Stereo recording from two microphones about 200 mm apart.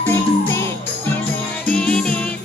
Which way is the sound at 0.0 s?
10° left (ahead or behind).